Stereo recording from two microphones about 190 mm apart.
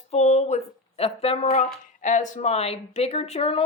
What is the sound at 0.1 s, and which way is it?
Speech, 35° left (ahead or behind).